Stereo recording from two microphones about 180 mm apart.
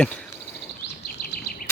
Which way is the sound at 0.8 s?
65° left (ahead or behind).